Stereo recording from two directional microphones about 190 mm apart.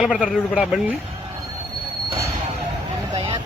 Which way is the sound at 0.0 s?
Centre (ahead or behind).